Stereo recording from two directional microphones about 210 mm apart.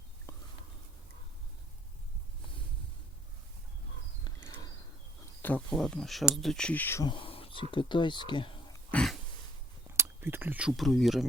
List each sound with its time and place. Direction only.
0.3 s a sound: 10° left (ahead or behind)
4.2 s wild animals: 20° left (ahead or behind)
5.4 s speech: 5° left (ahead or behind)
7.1 s a sound: 25° left (ahead or behind)
7.7 s speech: 25° left (ahead or behind)
8.9 s throat clearing: 5° left (ahead or behind)
9.8 s speech: 10° right (ahead or behind)